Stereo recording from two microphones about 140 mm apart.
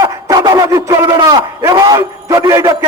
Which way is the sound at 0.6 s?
25° right (ahead or behind).